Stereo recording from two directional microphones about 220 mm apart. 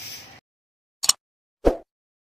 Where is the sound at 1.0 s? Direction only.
Centre (ahead or behind).